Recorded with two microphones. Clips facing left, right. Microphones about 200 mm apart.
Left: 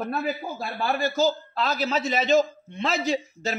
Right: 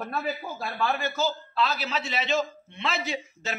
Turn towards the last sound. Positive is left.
turn(degrees=40)  # may be behind; listen again after turning